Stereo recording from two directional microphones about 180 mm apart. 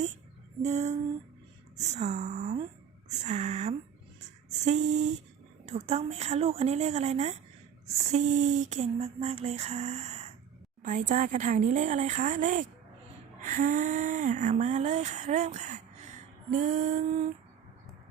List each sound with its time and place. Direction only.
0.6 s female singing: 40° right (ahead or behind)
10.8 s speech: 40° right (ahead or behind)
14.5 s female singing: 40° right (ahead or behind)
16.5 s speech: 45° right (ahead or behind)